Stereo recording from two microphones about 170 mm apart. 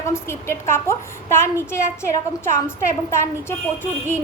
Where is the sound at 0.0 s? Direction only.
15° left (ahead or behind).